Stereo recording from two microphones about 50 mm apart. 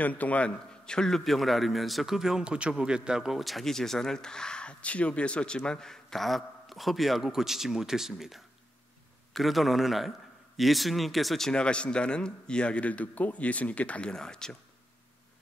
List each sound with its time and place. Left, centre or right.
0.0 s a man's voice: left; by 3.4 s centre
3.4 s a man's voice: centre
11.5 s a man's voice: left
14.1 s speech: centre